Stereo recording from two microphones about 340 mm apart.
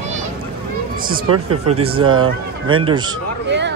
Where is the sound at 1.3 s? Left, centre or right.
Right.